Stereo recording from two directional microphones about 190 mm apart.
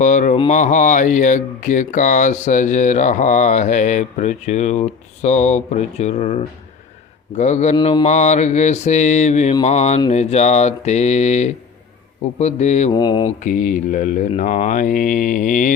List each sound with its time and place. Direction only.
0.0 s speech: 40° left (ahead or behind)
7.8 s speech: 25° left (ahead or behind)
8.0 s speech: 40° left (ahead or behind)
12.9 s speech: 20° left (ahead or behind)
13.4 s mantra: 40° left (ahead or behind)